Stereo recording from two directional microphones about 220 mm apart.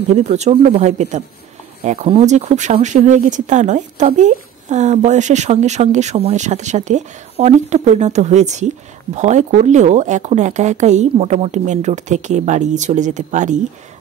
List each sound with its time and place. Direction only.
0.1 s speech: 30° right (ahead or behind)